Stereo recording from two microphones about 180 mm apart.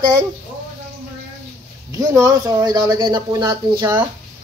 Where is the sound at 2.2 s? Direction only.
20° right (ahead or behind).